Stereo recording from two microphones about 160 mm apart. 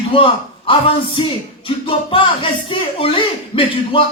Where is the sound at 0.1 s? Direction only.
35° left (ahead or behind).